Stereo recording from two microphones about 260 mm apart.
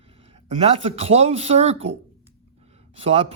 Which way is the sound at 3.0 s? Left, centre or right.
Right.